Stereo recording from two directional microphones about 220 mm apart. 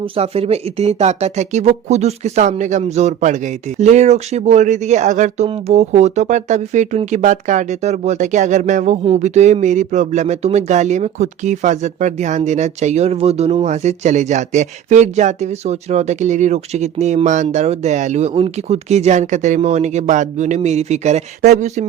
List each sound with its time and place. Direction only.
0.0 s speech: 25° right (ahead or behind)